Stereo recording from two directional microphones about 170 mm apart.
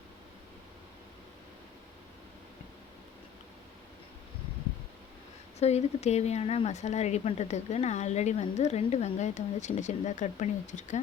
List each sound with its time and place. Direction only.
5.5 s speech: 40° left (ahead or behind)